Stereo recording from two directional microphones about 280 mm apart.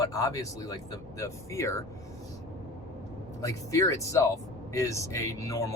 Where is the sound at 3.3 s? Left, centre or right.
Centre.